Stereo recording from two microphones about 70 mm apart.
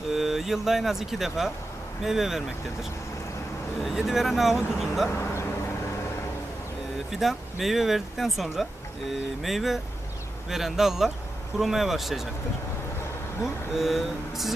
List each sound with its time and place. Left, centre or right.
0.1 s speech: centre
3.8 s speech: centre
5.0 s vehicle: left
7.1 s speech: centre
13.4 s speech: centre